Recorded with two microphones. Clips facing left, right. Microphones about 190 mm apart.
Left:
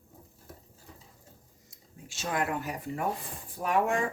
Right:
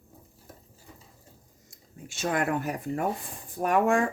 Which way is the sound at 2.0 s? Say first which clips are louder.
Right 4 dB; 55° right (ahead or behind).